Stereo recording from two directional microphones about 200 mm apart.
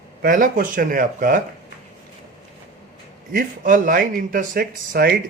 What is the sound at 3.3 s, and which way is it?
Speech, 45° right (ahead or behind).